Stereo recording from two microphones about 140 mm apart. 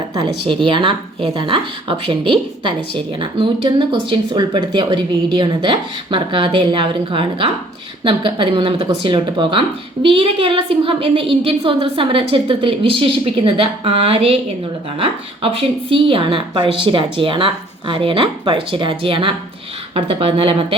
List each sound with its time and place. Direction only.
0.1 s a woman's voice: 35° right (ahead or behind)